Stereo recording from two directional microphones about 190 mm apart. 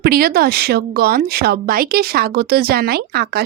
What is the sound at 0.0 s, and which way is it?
Speech, 50° right (ahead or behind).